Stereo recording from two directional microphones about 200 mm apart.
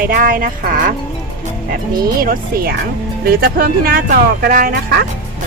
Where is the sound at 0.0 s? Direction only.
45° right (ahead or behind).